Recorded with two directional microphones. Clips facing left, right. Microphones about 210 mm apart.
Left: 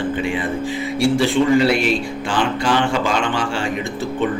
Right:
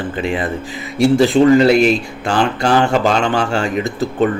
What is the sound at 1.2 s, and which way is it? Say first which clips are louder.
A man's voice: right 6 dB; 40° right (ahead or behind).